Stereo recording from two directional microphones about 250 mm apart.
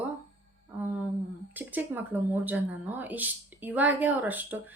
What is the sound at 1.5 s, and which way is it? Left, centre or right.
Speech, centre.